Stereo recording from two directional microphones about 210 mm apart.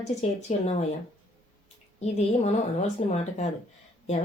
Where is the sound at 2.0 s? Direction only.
30° left (ahead or behind).